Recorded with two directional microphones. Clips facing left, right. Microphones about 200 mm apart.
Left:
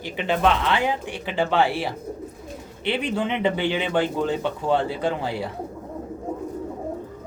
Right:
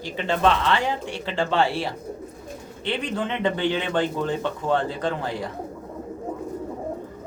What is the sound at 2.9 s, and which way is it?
Speech, 10° left (ahead or behind).